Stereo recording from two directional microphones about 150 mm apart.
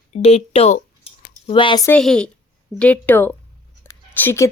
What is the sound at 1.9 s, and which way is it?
A woman's voice, 5° left (ahead or behind).